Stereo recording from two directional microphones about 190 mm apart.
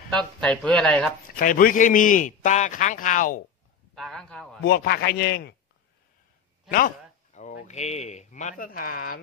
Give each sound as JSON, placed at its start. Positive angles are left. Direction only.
{"t": 0.1, "sound": "speech", "side_deg": 5}
{"t": 1.3, "sound": "a man's voice", "side_deg": 45}
{"t": 3.9, "sound": "speech", "side_deg": 0}
{"t": 4.6, "sound": "a man's voice", "side_deg": 55}
{"t": 7.3, "sound": "speech", "side_deg": 40}